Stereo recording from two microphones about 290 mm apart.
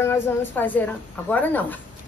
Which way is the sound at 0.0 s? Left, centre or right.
Centre.